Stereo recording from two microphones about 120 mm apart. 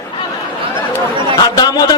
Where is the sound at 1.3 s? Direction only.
30° left (ahead or behind).